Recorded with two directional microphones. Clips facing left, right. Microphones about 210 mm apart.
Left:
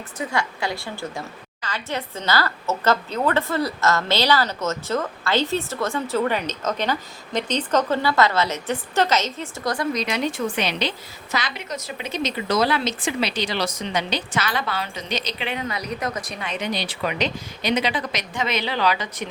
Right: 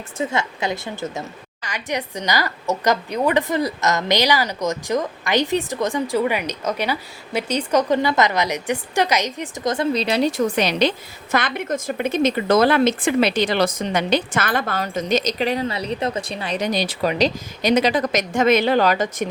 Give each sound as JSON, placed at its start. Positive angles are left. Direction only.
{"t": 0.2, "sound": "a woman's voice", "side_deg": -20}